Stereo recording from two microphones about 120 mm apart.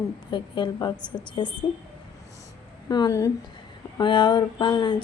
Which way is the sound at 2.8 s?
30° left (ahead or behind).